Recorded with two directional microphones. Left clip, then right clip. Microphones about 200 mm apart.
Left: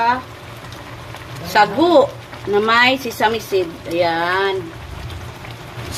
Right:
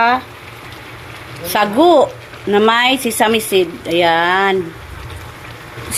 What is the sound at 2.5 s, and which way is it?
A woman's voice, 25° right (ahead or behind).